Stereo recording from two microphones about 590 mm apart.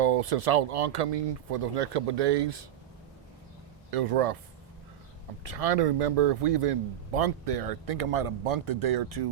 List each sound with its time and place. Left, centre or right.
0.0 s speech: right
3.9 s speech: right
5.5 s speech: right